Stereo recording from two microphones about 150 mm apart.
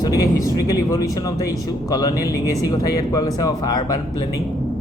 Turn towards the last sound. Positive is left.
turn(degrees=25)  # may be behind; listen again after turning